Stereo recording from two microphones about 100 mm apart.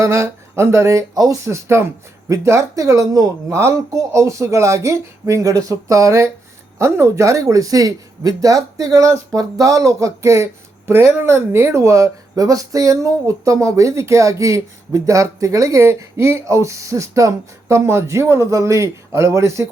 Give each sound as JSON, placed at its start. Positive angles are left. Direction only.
{"t": 0.0, "sound": "speech", "side_deg": -30}
{"t": 1.5, "sound": "speech", "side_deg": -25}